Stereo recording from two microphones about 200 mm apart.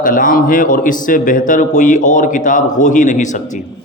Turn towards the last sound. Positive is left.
turn(degrees=40)  # may be behind; listen again after turning